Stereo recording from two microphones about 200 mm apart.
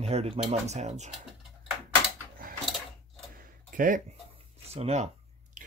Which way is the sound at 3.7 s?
40° right (ahead or behind).